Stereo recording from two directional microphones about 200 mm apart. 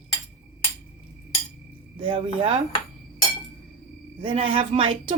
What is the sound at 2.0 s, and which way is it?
Speech, 25° right (ahead or behind).